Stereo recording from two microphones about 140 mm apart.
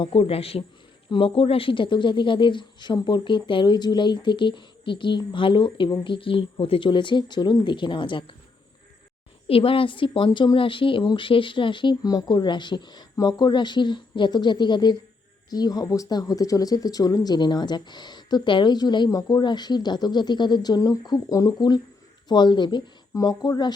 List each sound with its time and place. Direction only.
0.0 s a man's voice: 40° left (ahead or behind)
9.5 s a woman's voice: 40° left (ahead or behind)